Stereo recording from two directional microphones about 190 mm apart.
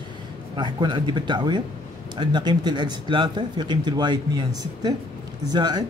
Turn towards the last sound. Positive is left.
turn(degrees=-20)  # may be behind; listen again after turning